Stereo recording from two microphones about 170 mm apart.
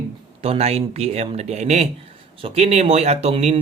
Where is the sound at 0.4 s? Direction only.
35° right (ahead or behind).